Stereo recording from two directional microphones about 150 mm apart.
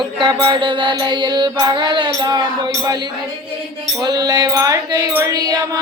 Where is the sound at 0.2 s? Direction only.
35° right (ahead or behind).